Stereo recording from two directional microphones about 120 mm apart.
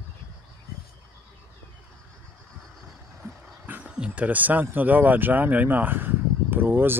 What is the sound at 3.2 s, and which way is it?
Vehicle, 25° right (ahead or behind).